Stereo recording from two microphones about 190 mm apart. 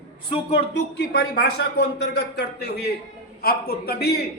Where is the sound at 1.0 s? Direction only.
55° left (ahead or behind).